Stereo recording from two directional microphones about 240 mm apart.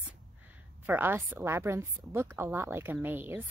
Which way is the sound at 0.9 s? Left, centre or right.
Centre.